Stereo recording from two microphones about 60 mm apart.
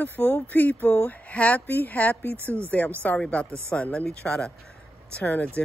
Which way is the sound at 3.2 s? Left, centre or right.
Centre.